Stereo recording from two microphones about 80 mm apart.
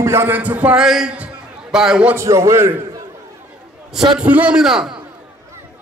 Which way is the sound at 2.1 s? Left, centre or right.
Right.